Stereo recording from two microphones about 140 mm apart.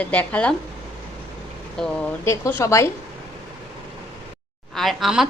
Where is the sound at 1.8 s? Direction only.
5° left (ahead or behind).